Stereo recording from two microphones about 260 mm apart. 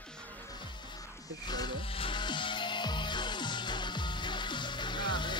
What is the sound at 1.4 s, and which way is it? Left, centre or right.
Music, centre.